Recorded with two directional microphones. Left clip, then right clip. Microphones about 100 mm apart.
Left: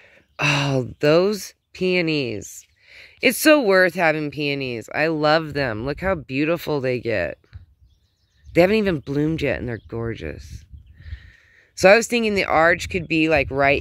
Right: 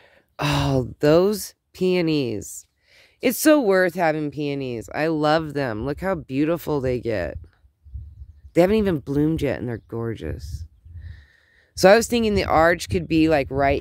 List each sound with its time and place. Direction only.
0.4 s speech: 30° right (ahead or behind); by 2.5 s 45° right (ahead or behind)
2.9 s speech: 25° right (ahead or behind)
8.5 s speech: 30° right (ahead or behind)
10.1 s speech: 35° right (ahead or behind)
11.1 s a sound: 40° right (ahead or behind)
11.7 s speech: 55° right (ahead or behind)
13.5 s speech: 20° right (ahead or behind)